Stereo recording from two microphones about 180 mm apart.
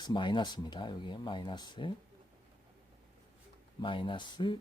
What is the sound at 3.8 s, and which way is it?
Speech, 25° left (ahead or behind).